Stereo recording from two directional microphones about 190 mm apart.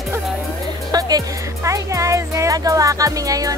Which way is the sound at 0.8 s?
20° right (ahead or behind).